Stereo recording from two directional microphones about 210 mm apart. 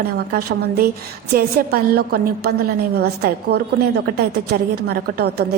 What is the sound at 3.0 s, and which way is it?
A woman's voice, 50° right (ahead or behind).